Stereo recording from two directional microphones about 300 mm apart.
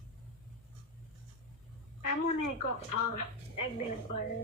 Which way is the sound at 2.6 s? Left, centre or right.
Left.